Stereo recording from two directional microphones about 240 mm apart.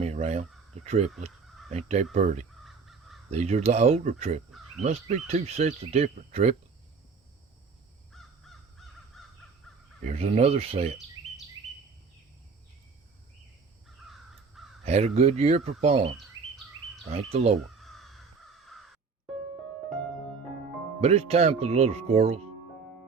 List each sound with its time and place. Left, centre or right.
0.0 s speech: right
1.5 s crow: centre
1.7 s speech: right
2.6 s crow: centre
3.2 s speech: right
8.1 s crow: centre
10.0 s speech: right
13.8 s crow: centre
14.8 s speech: right
17.7 s crow: centre
21.0 s speech: right